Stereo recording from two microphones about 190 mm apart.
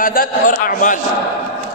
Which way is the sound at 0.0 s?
50° left (ahead or behind).